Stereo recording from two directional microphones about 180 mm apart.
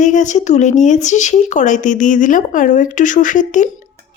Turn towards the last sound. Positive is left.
turn(degrees=45)  # may be behind; listen again after turning